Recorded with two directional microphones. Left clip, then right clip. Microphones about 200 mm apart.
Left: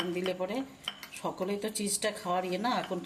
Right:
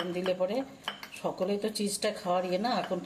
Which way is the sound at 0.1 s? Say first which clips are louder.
Right 3 dB; 20° left (ahead or behind).